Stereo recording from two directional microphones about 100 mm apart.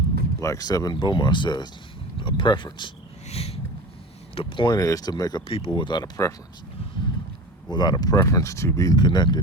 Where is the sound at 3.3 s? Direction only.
90° left.